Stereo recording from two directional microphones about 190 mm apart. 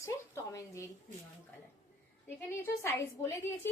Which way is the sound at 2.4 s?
10° left (ahead or behind).